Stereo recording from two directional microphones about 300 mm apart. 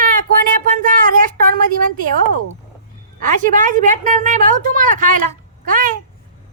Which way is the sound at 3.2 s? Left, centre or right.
Right.